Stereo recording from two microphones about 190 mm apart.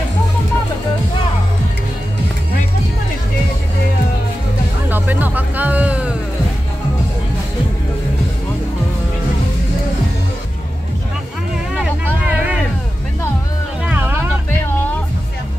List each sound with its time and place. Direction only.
4.8 s music: 10° right (ahead or behind)
11.7 s a sound: 5° right (ahead or behind)
13.8 s music: 10° right (ahead or behind)